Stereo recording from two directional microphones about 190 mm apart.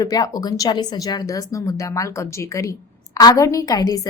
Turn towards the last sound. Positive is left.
turn(degrees=20)  # may be behind; listen again after turning